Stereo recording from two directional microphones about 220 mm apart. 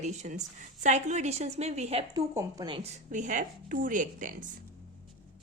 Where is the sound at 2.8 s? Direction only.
30° right (ahead or behind).